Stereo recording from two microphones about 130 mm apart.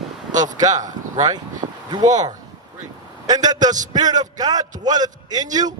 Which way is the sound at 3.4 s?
70° right (ahead or behind).